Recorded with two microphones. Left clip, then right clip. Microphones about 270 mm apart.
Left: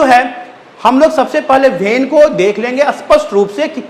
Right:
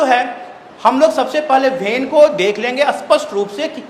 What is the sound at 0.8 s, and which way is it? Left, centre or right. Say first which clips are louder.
A man's voice: left 3 dB; left.